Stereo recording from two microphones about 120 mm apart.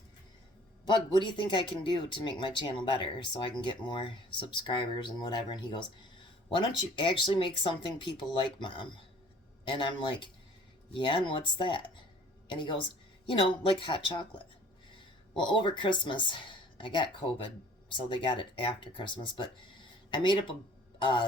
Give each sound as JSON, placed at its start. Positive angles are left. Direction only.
{"t": 0.9, "sound": "a woman's voice", "side_deg": 40}